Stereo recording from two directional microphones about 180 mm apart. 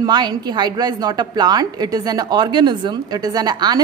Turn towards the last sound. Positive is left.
turn(degrees=-25)  # may be behind; listen again after turning